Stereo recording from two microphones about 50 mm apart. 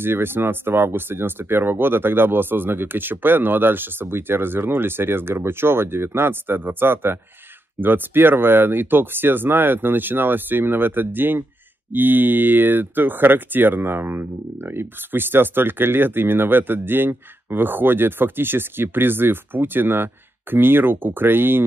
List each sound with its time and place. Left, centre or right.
0.0 s speech: right